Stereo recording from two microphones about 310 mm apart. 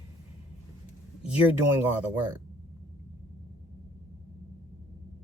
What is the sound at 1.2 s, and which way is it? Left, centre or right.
Speech, centre.